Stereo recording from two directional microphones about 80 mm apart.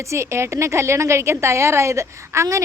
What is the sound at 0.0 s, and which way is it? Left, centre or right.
Speech, right.